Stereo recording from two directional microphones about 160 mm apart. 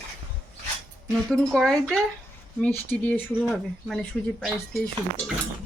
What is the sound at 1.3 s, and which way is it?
Speech, centre (ahead or behind).